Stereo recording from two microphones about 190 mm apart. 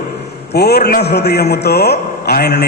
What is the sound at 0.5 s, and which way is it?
A man's voice, 60° left (ahead or behind).